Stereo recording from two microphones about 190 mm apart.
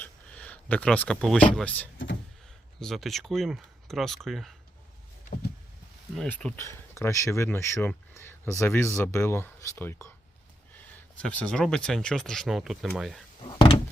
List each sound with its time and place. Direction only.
0.0 s speech: 5° left (ahead or behind)
6.1 s speech: 5° left (ahead or behind)
11.2 s speech: 5° left (ahead or behind)
13.4 s door: 25° left (ahead or behind)